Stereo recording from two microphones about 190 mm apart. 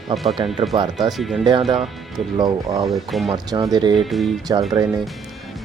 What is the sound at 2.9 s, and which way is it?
Speech, centre (ahead or behind).